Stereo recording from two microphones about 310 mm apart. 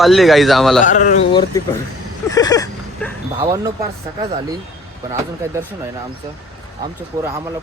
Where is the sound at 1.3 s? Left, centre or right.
Centre.